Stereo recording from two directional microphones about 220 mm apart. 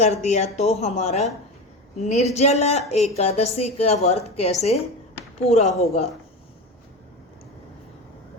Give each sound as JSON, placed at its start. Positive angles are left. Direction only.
{"t": 0.0, "sound": "a woman's voice", "side_deg": 30}